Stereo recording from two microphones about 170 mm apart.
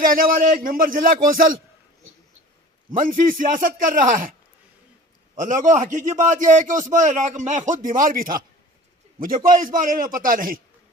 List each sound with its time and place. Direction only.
0.0 s speech: 55° right (ahead or behind)
3.0 s a man's voice: 55° right (ahead or behind)
5.4 s a man's voice: 50° right (ahead or behind)